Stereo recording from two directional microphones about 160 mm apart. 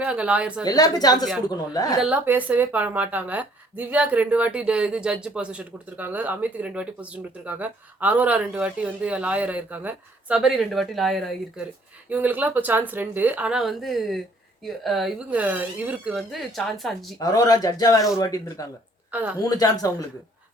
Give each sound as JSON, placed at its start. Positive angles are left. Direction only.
{"t": 0.0, "sound": "a woman's voice", "side_deg": -5}
{"t": 0.6, "sound": "speech", "side_deg": 25}
{"t": 2.0, "sound": "a woman's voice", "side_deg": -10}
{"t": 12.0, "sound": "a woman's voice", "side_deg": -10}
{"t": 15.3, "sound": "a woman's voice", "side_deg": -10}
{"t": 17.2, "sound": "speech", "side_deg": 25}
{"t": 19.1, "sound": "a woman's voice", "side_deg": -10}
{"t": 19.4, "sound": "speech", "side_deg": 25}